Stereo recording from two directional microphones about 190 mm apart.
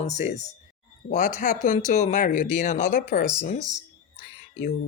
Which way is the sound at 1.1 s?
50° left (ahead or behind).